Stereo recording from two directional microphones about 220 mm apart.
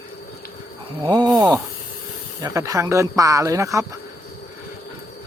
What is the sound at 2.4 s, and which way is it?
Speech, 15° right (ahead or behind).